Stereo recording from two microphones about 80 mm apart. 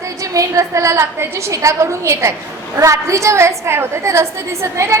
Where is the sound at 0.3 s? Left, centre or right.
Right.